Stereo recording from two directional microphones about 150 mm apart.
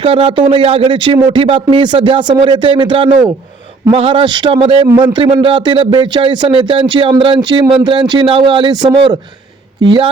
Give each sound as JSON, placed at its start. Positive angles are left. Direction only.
{"t": 0.0, "sound": "speech", "side_deg": -40}